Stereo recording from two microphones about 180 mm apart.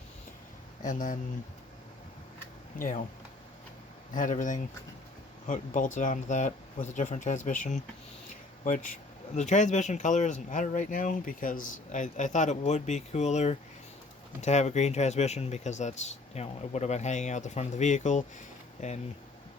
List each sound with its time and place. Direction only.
0.8 s speech: 45° left (ahead or behind)
2.7 s speech: 45° left (ahead or behind)
4.1 s speech: 45° left (ahead or behind)